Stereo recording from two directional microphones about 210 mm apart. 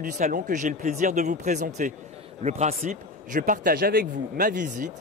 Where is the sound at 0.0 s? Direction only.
40° right (ahead or behind).